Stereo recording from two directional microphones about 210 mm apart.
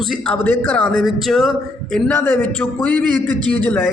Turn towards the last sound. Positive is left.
turn(degrees=5)  # may be behind; listen again after turning